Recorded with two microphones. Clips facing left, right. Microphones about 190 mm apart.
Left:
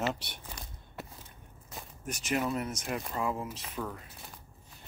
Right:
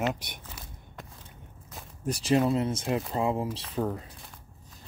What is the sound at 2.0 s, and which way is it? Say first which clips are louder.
Speech: right 8 dB; 35° right (ahead or behind).